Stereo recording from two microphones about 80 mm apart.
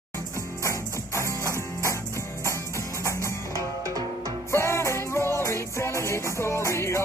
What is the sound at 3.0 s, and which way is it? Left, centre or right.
Music, left.